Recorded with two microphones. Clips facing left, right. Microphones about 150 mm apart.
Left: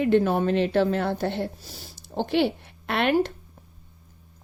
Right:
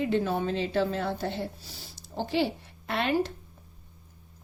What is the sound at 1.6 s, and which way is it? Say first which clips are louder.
Speech: left 4 dB; 45° left (ahead or behind).